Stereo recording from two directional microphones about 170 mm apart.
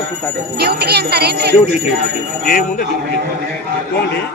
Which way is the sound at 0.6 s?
70° right (ahead or behind).